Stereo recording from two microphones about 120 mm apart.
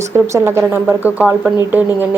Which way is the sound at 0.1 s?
20° right (ahead or behind).